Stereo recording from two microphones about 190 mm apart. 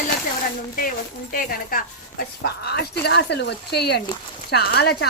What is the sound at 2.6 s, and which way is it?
A woman's voice, 60° left (ahead or behind).